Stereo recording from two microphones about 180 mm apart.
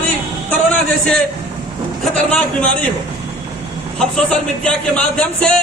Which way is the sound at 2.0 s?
5° left (ahead or behind).